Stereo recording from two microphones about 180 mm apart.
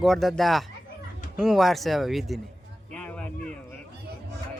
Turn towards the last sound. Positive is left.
turn(degrees=5)  # may be behind; listen again after turning